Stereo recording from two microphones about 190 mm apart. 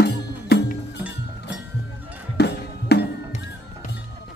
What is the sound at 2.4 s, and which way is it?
Music, 60° left (ahead or behind).